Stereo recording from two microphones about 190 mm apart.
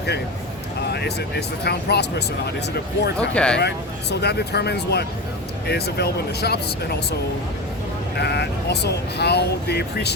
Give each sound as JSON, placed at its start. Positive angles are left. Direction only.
{"t": 0.9, "sound": "speech", "side_deg": 60}
{"t": 3.2, "sound": "speech", "side_deg": 5}
{"t": 3.6, "sound": "speech", "side_deg": 60}
{"t": 8.2, "sound": "speech", "side_deg": 60}